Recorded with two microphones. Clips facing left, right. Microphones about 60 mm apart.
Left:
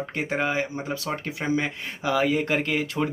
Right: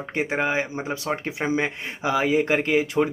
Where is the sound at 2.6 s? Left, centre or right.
Right.